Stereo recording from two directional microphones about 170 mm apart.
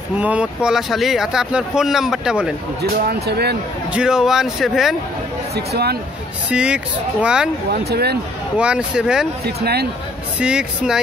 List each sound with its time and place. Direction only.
0.2 s speech: 5° right (ahead or behind)
2.8 s speech: 70° right (ahead or behind)
3.9 s speech: 5° right (ahead or behind)
5.7 s speech: 70° right (ahead or behind)
6.5 s speech: 5° right (ahead or behind)
7.7 s speech: 70° right (ahead or behind)
8.5 s speech: 5° right (ahead or behind)
10.4 s speech: 5° right (ahead or behind)